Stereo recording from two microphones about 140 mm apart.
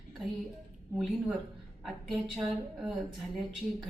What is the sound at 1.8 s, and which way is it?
A woman's voice, centre (ahead or behind).